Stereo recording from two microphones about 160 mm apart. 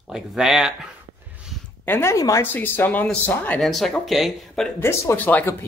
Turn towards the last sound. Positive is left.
turn(degrees=15)  # may be behind; listen again after turning